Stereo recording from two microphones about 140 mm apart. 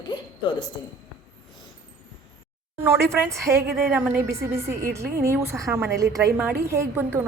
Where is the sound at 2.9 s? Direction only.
20° right (ahead or behind).